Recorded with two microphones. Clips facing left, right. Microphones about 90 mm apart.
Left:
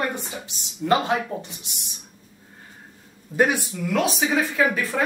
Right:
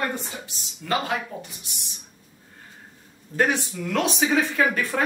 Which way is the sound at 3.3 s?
10° left (ahead or behind).